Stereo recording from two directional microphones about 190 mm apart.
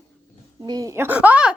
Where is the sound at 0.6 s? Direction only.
20° right (ahead or behind).